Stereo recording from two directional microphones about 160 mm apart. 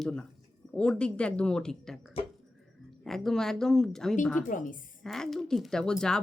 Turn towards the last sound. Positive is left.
turn(degrees=5)  # may be behind; listen again after turning